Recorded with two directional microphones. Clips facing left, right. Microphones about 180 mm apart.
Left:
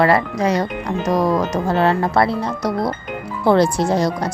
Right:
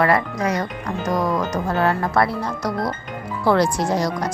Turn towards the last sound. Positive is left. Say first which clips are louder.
# left 3 dB
turn(degrees=25)  # may be behind; listen again after turning